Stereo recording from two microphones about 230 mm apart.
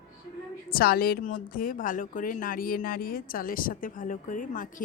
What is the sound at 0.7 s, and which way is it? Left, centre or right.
Speech, left.